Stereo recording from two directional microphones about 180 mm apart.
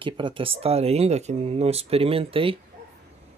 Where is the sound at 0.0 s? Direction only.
30° right (ahead or behind).